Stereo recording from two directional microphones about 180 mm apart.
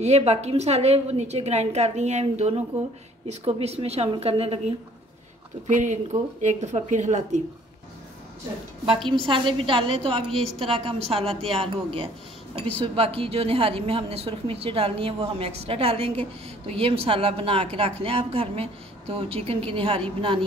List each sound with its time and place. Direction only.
0.0 s a woman's voice: 40° right (ahead or behind)
5.7 s a woman's voice: 45° right (ahead or behind)
9.1 s a woman's voice: 30° right (ahead or behind)